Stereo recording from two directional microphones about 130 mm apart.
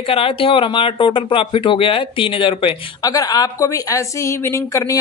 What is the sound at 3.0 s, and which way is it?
A woman's voice, 30° left (ahead or behind).